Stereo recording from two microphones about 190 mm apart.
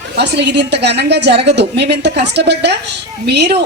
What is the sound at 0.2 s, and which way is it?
A woman's voice, 60° right (ahead or behind).